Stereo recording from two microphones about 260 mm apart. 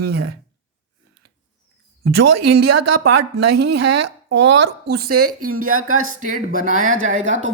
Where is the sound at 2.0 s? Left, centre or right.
Right.